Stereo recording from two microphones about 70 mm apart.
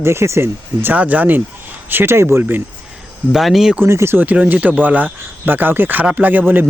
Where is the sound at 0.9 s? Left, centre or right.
Right.